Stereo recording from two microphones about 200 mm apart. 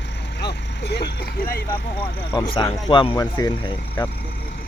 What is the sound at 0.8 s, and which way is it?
Speech, 55° left (ahead or behind).